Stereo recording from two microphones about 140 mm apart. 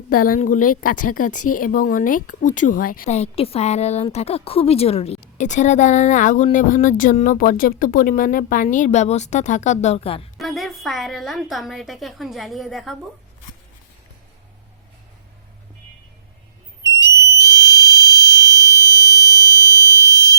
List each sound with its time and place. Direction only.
0.1 s a woman's voice: 85° left
3.1 s a woman's voice: 45° left (ahead or behind)
10.3 s a woman's voice: centre (ahead or behind)
17.3 s fire alarm: 25° left (ahead or behind)